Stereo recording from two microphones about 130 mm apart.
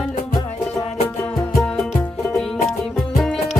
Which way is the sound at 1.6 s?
5° left (ahead or behind).